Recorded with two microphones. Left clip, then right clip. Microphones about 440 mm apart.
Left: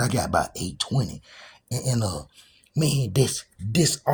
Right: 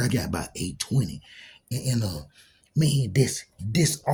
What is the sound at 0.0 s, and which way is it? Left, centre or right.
Speech, right.